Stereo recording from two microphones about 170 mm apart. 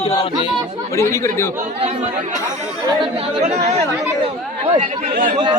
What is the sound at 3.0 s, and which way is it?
Speech, 40° right (ahead or behind).